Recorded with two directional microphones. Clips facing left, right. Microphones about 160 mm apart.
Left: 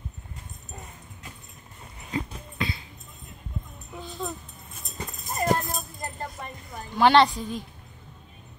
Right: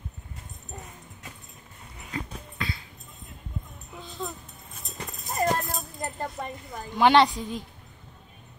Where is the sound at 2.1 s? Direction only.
20° left (ahead or behind).